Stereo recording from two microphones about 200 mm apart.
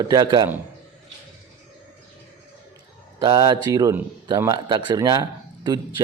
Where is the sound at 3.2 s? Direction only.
20° right (ahead or behind).